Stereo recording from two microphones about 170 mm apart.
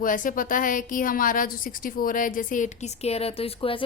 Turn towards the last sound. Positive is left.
turn(degrees=35)  # may be behind; listen again after turning